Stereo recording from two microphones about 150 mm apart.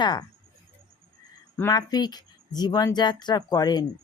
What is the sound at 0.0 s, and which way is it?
Speech, 30° left (ahead or behind).